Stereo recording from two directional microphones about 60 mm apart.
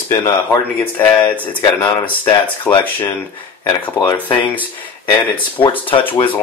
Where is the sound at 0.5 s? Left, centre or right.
Left.